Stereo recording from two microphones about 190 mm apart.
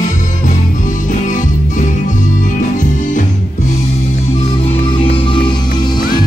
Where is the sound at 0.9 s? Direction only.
40° left (ahead or behind).